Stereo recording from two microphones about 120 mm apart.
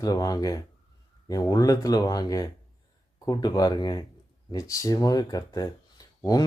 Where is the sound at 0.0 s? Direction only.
30° left (ahead or behind).